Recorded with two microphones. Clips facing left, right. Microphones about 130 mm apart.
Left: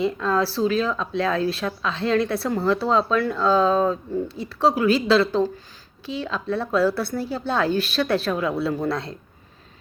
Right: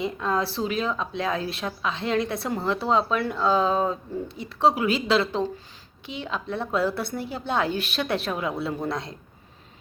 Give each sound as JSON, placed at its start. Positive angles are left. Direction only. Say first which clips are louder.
{"t": 0.0, "sound": "speech", "louder": "left 4 dB", "side_deg": -20}